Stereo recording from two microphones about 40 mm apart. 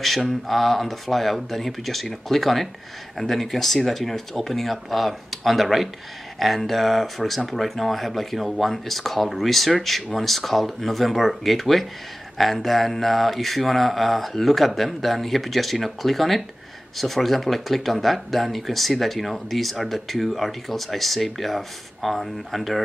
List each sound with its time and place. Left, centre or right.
0.0 s mantra: centre